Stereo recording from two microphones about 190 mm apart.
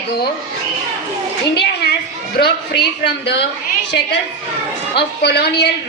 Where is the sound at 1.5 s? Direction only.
60° left (ahead or behind).